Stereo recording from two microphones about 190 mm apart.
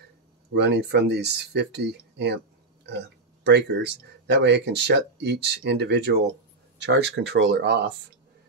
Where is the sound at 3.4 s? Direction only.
65° right (ahead or behind).